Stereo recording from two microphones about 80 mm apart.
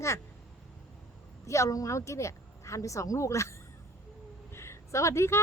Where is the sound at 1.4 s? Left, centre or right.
Left.